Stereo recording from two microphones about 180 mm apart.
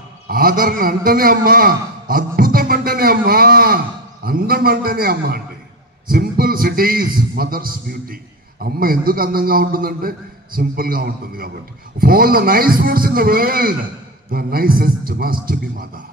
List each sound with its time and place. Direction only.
0.3 s a man's voice: 55° right (ahead or behind)